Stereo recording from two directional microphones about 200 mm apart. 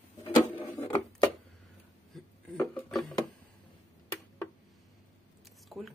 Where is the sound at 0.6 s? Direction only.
10° left (ahead or behind).